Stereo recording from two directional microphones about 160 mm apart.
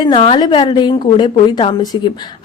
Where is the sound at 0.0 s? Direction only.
35° left (ahead or behind).